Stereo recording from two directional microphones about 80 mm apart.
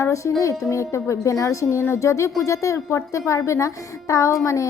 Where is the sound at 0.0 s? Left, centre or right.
Left.